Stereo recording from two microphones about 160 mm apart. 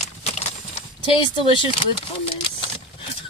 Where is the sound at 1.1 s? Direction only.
35° left (ahead or behind).